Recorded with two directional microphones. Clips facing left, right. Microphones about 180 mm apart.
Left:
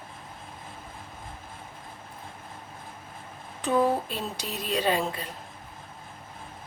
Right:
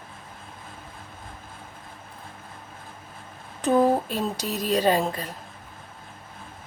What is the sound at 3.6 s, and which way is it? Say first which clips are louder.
A woman's voice: right 4 dB; 40° right (ahead or behind).